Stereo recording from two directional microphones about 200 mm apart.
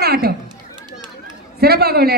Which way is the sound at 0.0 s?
50° right (ahead or behind).